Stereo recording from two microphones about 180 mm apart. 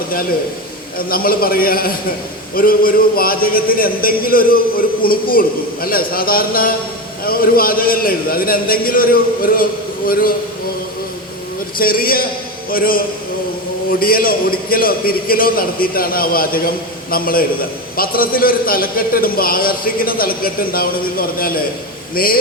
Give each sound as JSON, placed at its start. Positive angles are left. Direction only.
{"t": 0.9, "sound": "a man's voice", "side_deg": 55}
{"t": 11.8, "sound": "a man's voice", "side_deg": 55}
{"t": 14.0, "sound": "a man's voice", "side_deg": 55}